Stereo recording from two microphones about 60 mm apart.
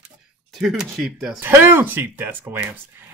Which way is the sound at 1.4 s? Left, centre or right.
Right.